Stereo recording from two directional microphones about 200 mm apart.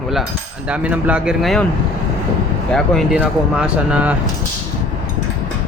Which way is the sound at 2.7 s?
Centre (ahead or behind).